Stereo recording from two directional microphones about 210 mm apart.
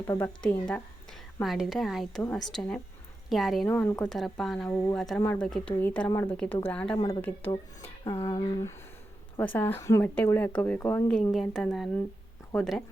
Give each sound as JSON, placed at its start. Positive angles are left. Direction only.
{"t": 0.1, "sound": "a woman's voice", "side_deg": 10}
{"t": 1.4, "sound": "a woman's voice", "side_deg": 0}
{"t": 6.1, "sound": "a woman's voice", "side_deg": 20}
{"t": 6.3, "sound": "a woman's voice", "side_deg": 5}